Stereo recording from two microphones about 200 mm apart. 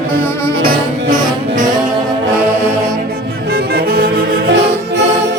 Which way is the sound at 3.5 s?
50° right (ahead or behind).